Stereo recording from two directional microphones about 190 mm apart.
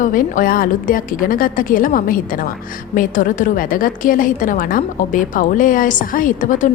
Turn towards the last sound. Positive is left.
turn(degrees=40)  # may be behind; listen again after turning